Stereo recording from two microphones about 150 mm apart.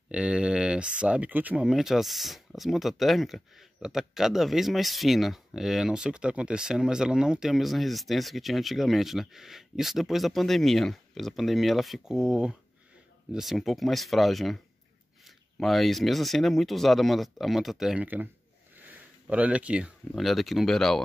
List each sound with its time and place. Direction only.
0.1 s speech: 5° right (ahead or behind)